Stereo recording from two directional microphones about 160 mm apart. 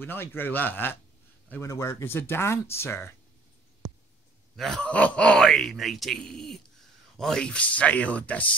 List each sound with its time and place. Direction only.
0.0 s speech: 15° left (ahead or behind)
4.6 s speech: 5° left (ahead or behind)